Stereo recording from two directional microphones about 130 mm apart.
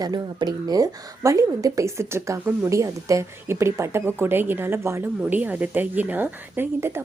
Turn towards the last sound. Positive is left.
turn(degrees=-20)  # may be behind; listen again after turning